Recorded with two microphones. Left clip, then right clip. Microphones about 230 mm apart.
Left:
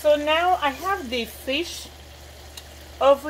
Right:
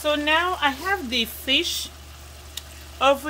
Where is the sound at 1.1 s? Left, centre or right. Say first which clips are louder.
Right 4 dB; right.